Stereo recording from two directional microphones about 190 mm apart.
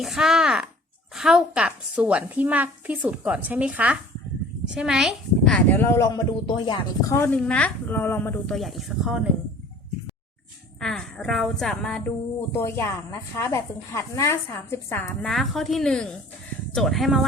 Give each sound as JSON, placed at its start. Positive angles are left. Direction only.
{"t": 0.0, "sound": "a woman's voice", "side_deg": 0}
{"t": 7.1, "sound": "a woman's voice", "side_deg": 10}
{"t": 8.5, "sound": "a woman's voice", "side_deg": 0}
{"t": 10.8, "sound": "a woman's voice", "side_deg": 5}